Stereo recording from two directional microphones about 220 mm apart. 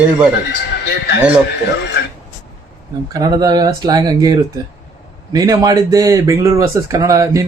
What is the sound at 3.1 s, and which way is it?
Speech, 15° right (ahead or behind).